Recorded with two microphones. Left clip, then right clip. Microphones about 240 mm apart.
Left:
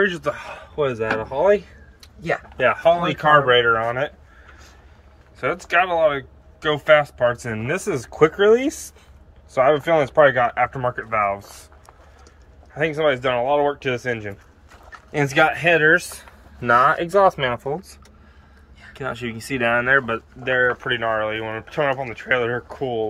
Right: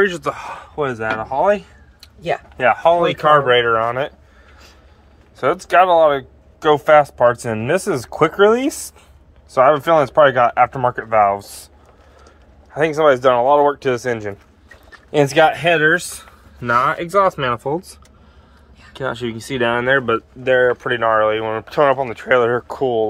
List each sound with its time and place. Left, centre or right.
0.0 s speech: centre
2.0 s a sound: right
2.6 s speech: centre
5.4 s speech: right
10.0 s speech: right
12.7 s speech: centre
15.0 s speech: right
18.9 s speech: right